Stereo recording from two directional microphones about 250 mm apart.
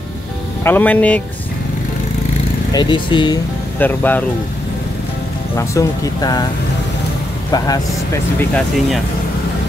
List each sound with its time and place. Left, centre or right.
0.7 s speech: centre
2.7 s speech: centre
3.8 s speech: centre
5.6 s speech: centre
7.5 s speech: centre